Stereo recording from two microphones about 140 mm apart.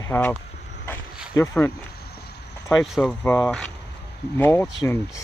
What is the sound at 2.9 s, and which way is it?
Speech, 5° left (ahead or behind).